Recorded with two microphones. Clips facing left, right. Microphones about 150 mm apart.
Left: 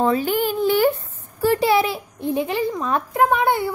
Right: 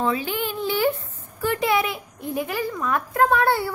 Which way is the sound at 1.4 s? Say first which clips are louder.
Left 5 dB; 35° left (ahead or behind).